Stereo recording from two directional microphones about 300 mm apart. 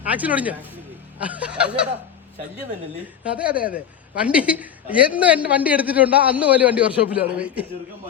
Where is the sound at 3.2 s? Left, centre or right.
Centre.